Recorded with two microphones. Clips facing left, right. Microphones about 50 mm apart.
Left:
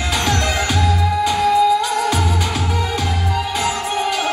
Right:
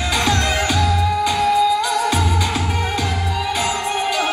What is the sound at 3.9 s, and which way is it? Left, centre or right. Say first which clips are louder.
Music: even; right.